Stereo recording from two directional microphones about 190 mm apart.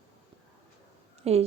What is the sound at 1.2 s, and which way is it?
Speech, 35° right (ahead or behind).